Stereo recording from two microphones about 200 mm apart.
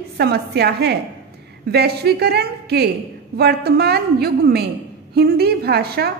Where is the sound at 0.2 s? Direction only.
55° right (ahead or behind).